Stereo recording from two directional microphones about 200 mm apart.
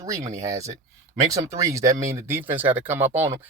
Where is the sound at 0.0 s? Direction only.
15° right (ahead or behind).